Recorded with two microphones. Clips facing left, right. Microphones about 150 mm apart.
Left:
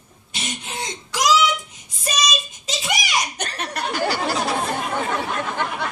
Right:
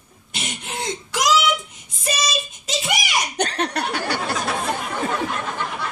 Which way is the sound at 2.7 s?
60° right (ahead or behind).